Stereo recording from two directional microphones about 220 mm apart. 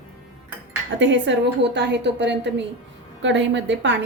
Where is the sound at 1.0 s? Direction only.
55° right (ahead or behind).